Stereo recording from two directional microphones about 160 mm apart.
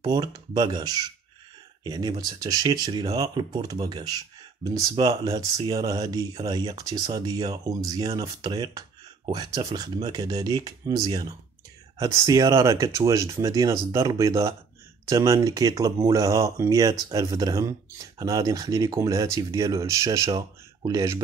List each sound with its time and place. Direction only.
0.0 s speech: 25° right (ahead or behind)